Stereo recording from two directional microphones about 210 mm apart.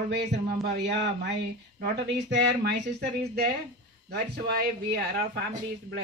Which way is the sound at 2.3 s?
50° right (ahead or behind).